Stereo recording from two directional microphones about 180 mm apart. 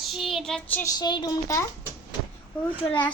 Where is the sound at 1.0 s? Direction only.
25° left (ahead or behind).